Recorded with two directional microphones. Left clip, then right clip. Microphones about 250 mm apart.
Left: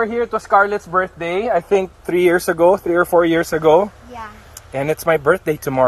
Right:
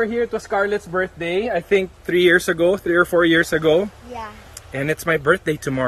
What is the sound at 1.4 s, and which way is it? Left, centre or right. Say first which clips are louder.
Speech: left 4 dB; left.